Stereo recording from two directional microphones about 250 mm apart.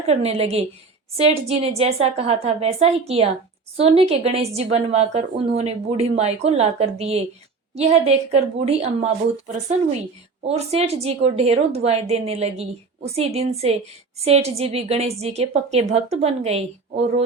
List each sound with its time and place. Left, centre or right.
0.1 s a woman's voice: right
10.5 s a woman's voice: right